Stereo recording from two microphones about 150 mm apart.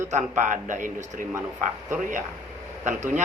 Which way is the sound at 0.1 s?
55° right (ahead or behind).